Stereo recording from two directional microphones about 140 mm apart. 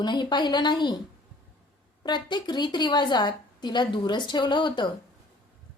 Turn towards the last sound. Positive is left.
turn(degrees=35)  # may be behind; listen again after turning